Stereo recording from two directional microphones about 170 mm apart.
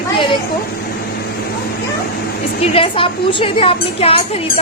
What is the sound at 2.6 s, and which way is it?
Speech, 30° left (ahead or behind).